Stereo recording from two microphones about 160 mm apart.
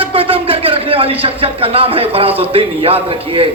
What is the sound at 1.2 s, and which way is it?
Speech, 35° right (ahead or behind).